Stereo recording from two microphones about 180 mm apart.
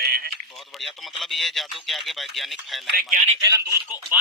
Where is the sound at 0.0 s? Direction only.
55° right (ahead or behind).